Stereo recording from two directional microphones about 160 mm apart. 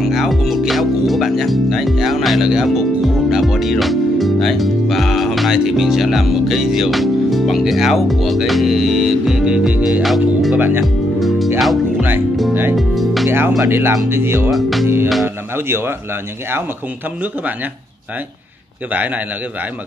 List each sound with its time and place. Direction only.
0.0 s speech: centre (ahead or behind)
10.6 s speech: 15° right (ahead or behind)
11.1 s music: centre (ahead or behind)
12.7 s speech: centre (ahead or behind)
13.6 s speech: 15° right (ahead or behind)
14.5 s speech: centre (ahead or behind)
15.2 s speech: 15° right (ahead or behind)
18.9 s speech: 10° right (ahead or behind)